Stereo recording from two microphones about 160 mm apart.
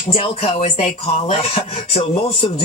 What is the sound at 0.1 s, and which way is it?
Speech, 40° left (ahead or behind).